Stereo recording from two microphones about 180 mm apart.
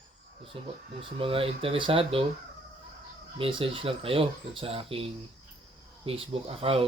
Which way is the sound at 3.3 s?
30° right (ahead or behind).